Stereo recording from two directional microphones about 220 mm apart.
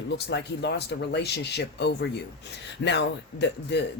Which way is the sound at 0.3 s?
50° left (ahead or behind).